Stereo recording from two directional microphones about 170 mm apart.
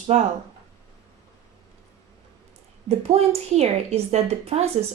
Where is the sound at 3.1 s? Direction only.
35° right (ahead or behind).